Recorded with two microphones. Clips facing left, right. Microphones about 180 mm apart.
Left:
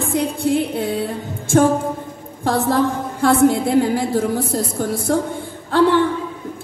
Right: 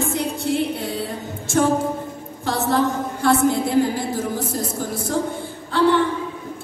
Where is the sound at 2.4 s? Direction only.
55° left (ahead or behind).